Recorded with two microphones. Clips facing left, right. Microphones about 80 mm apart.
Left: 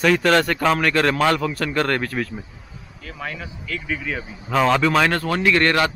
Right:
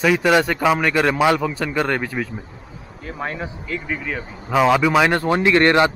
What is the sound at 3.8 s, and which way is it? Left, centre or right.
A man's voice, centre.